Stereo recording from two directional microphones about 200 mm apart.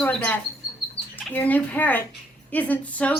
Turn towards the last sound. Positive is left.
turn(degrees=5)  # may be behind; listen again after turning